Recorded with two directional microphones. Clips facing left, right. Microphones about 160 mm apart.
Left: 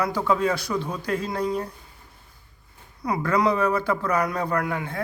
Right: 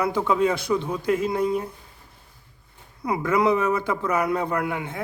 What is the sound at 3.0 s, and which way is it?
A man's voice, 20° right (ahead or behind).